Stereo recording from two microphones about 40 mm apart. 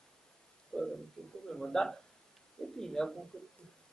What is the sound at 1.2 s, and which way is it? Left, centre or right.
Bird, centre.